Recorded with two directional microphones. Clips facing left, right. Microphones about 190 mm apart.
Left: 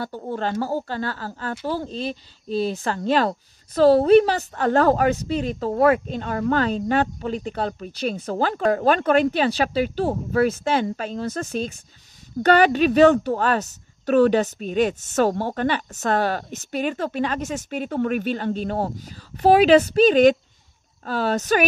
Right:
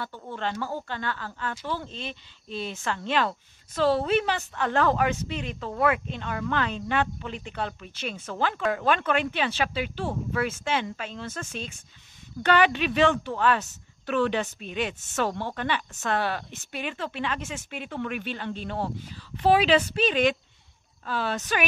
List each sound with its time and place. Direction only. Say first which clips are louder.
0.0 s speech: left 6 dB; 40° left (ahead or behind)